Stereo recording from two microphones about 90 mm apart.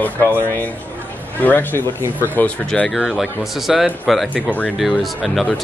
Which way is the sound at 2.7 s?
5° left (ahead or behind).